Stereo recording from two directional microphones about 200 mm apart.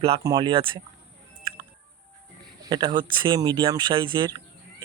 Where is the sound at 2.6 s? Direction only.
20° right (ahead or behind).